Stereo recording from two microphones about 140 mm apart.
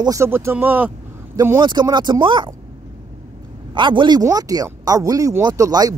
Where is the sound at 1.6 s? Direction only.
30° right (ahead or behind).